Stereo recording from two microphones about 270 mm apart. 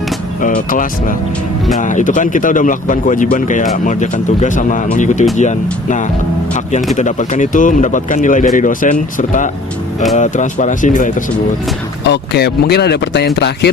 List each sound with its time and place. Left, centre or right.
0.4 s speech: left